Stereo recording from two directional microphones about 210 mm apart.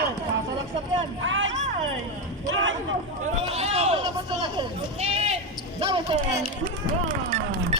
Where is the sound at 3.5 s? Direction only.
30° right (ahead or behind).